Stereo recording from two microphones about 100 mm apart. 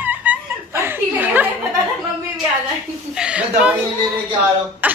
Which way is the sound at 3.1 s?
10° right (ahead or behind).